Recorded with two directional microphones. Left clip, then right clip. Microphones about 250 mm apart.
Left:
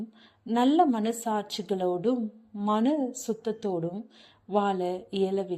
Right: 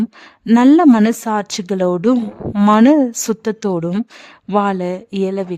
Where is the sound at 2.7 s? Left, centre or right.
Right.